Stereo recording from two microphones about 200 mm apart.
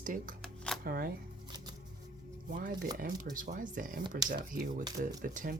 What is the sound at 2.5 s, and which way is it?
Speech, 40° right (ahead or behind).